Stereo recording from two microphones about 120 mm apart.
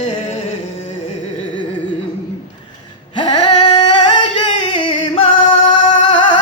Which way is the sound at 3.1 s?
40° left (ahead or behind).